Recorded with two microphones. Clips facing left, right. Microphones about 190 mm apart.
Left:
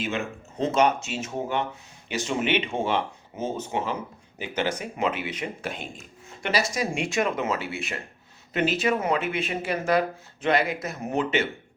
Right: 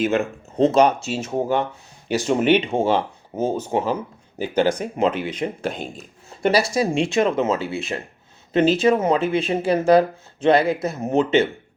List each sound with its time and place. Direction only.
0.0 s speech: 40° right (ahead or behind)